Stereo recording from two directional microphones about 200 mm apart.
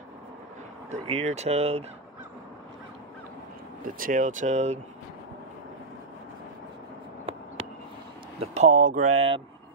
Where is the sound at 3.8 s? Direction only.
45° right (ahead or behind).